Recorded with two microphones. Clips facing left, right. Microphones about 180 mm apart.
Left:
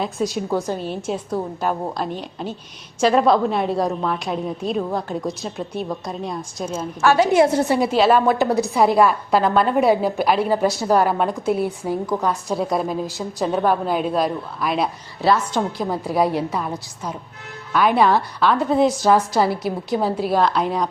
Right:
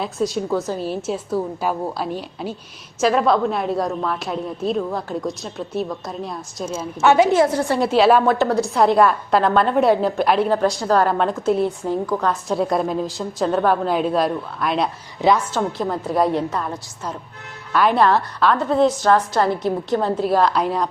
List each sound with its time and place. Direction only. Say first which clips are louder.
0.0 s a woman's voice: right 1 dB; centre (ahead or behind)
7.0 s a woman's voice: right 2 dB; 20° right (ahead or behind)
7.4 s a woman's voice: left 2 dB; 25° left (ahead or behind)
7.8 s a woman's voice: right 4 dB; 5° right (ahead or behind)
8.4 s a woman's voice: even; 15° left (ahead or behind)
8.7 s a woman's voice: right 1 dB; 5° left (ahead or behind)
12.3 s a woman's voice: right 1 dB; centre (ahead or behind)
15.2 s a woman's voice: right 1 dB; 20° right (ahead or behind)
15.8 s a woman's voice: right 1 dB; 5° left (ahead or behind)
18.6 s a woman's voice: even; 15° left (ahead or behind)